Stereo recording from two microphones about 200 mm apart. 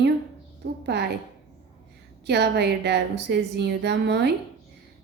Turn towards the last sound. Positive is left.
turn(degrees=-60)  # may be behind; listen again after turning